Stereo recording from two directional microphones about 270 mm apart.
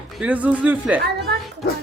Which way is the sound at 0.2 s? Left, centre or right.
Centre.